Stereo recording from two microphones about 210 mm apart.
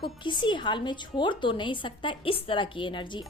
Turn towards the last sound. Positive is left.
turn(degrees=20)  # may be behind; listen again after turning